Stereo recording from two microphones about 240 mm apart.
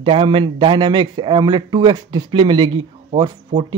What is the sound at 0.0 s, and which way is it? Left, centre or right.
A man's voice, right.